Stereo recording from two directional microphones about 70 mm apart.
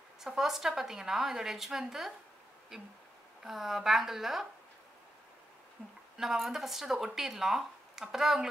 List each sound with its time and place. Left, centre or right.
0.2 s speech: centre
5.8 s speech: centre
6.1 s speech: centre